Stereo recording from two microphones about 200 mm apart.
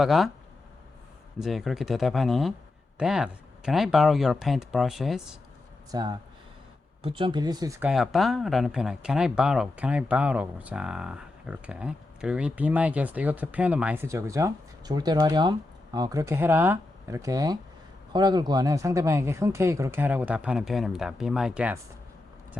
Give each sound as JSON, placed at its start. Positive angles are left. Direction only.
{"t": 0.0, "sound": "speech", "side_deg": 0}
{"t": 1.4, "sound": "speech", "side_deg": 0}
{"t": 5.9, "sound": "speech", "side_deg": -20}
{"t": 7.9, "sound": "speech", "side_deg": 0}